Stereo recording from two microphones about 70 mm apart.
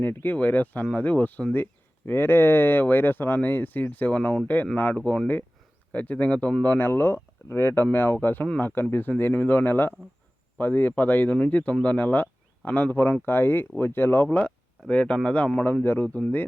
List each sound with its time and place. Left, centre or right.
0.0 s speech: left
6.7 s speech: left
14.3 s speech: centre
15.6 s speech: left
16.0 s speech: centre